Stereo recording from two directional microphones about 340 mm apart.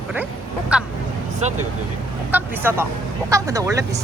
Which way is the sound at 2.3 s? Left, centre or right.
Centre.